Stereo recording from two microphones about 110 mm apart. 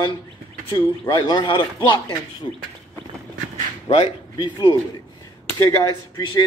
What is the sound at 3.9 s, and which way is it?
Speech, 50° left (ahead or behind).